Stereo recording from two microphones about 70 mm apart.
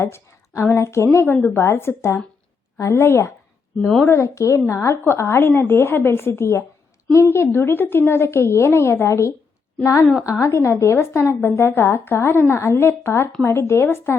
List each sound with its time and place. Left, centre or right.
0.0 s a woman's voice: left
3.8 s speech: centre
4.0 s a woman's voice: left